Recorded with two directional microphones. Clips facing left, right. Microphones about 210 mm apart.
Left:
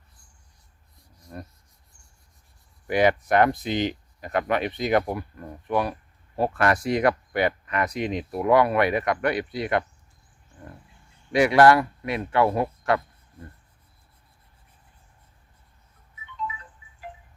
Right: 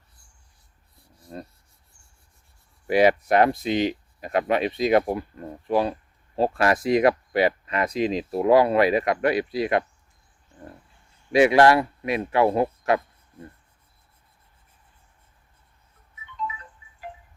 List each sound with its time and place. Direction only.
1.1 s rub: 25° right (ahead or behind)
2.8 s speech: 25° right (ahead or behind)
11.3 s speech: 20° right (ahead or behind)